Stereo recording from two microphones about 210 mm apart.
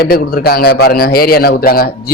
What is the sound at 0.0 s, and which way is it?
A man's voice, 45° left (ahead or behind).